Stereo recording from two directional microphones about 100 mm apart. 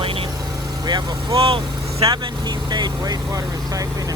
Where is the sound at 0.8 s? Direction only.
45° right (ahead or behind).